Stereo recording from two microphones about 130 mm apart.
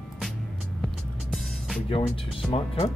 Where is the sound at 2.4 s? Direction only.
Centre (ahead or behind).